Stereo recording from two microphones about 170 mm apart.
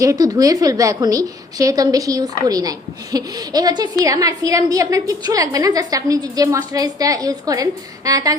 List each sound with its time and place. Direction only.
0.0 s a woman's voice: 20° right (ahead or behind)